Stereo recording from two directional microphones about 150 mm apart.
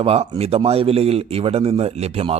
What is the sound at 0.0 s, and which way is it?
Speech, 40° right (ahead or behind).